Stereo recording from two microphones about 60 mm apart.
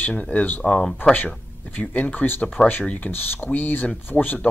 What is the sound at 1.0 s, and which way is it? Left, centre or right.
Speech, left.